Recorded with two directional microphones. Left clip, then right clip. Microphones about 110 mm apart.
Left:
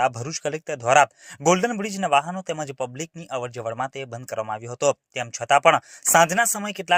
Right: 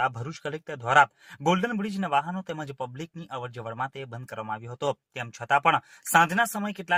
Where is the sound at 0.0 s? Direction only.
20° left (ahead or behind).